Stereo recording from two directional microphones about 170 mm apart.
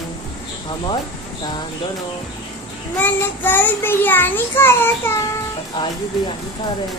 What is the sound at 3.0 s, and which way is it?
A child's voice, 10° left (ahead or behind).